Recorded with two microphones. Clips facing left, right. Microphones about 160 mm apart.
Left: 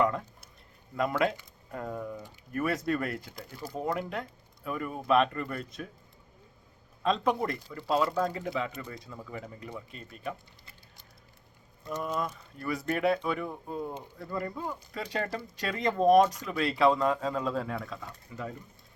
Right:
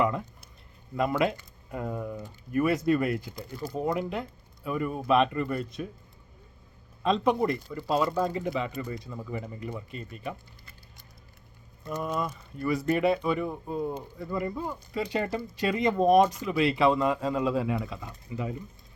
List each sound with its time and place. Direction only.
0.9 s speech: 5° right (ahead or behind)
7.0 s speech: centre (ahead or behind)
11.9 s speech: 5° right (ahead or behind)